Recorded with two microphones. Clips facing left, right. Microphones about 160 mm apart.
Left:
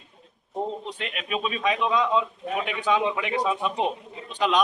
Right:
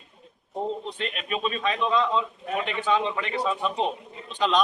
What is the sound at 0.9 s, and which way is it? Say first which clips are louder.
A man's voice: even; 5° left (ahead or behind).